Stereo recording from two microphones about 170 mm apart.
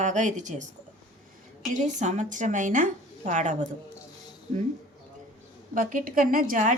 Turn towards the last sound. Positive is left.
turn(degrees=-50)  # may be behind; listen again after turning